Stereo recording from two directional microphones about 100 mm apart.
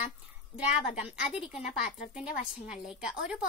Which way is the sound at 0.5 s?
10° right (ahead or behind).